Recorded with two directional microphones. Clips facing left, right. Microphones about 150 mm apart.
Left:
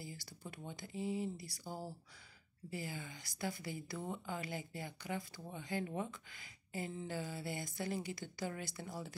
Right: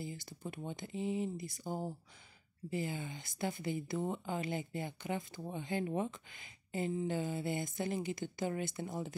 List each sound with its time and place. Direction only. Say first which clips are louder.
0.0 s speech: right 6 dB; 20° right (ahead or behind)